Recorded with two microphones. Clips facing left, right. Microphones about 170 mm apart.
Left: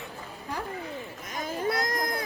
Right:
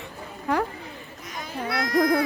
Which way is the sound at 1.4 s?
40° left (ahead or behind).